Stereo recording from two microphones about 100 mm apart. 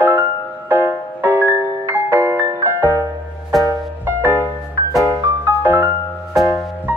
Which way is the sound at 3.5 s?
Centre (ahead or behind).